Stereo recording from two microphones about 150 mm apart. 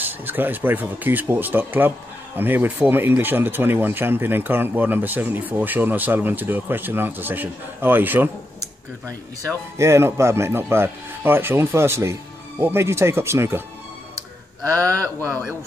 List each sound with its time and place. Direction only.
0.0 s speech: 15° right (ahead or behind)
9.8 s speech: 20° right (ahead or behind)
14.6 s speech: 20° right (ahead or behind)